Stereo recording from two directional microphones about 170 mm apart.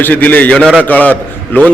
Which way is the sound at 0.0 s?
10° left (ahead or behind).